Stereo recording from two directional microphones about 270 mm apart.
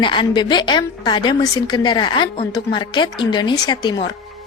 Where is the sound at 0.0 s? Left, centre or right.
Centre.